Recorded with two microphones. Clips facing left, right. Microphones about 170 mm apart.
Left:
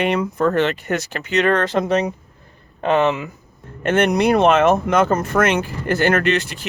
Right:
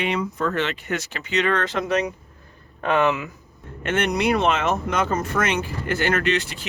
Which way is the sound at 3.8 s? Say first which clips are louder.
Left 6 dB; 45° left (ahead or behind).